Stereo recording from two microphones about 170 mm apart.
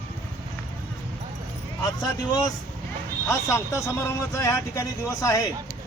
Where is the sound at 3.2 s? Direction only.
15° left (ahead or behind).